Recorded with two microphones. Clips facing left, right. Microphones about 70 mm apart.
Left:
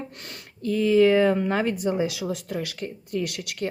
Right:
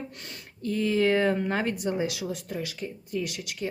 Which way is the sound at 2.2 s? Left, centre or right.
Left.